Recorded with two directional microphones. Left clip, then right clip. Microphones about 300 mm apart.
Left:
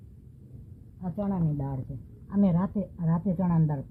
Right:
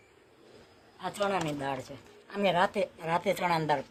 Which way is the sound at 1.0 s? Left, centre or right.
Right.